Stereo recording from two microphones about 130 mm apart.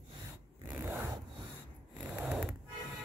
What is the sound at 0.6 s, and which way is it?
Zipper, 15° right (ahead or behind).